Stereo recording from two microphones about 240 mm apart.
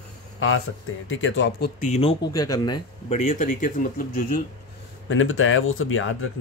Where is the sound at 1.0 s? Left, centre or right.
Left.